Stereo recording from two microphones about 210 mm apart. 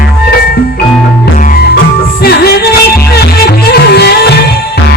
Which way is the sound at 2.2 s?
50° left (ahead or behind).